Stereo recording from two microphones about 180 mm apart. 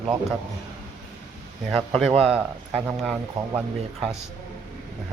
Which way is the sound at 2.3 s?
10° right (ahead or behind).